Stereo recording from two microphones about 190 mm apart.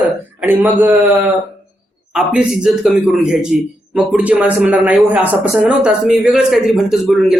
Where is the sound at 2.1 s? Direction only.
5° right (ahead or behind).